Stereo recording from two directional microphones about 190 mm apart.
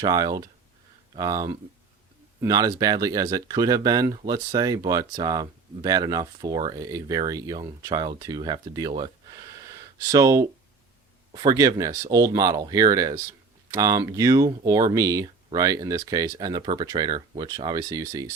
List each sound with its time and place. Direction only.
0.0 s speech: 20° right (ahead or behind)
9.6 s a sound: 20° right (ahead or behind)
11.3 s speech: 20° right (ahead or behind)